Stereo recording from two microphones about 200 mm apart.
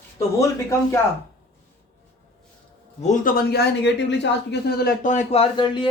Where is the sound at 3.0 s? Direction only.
40° left (ahead or behind).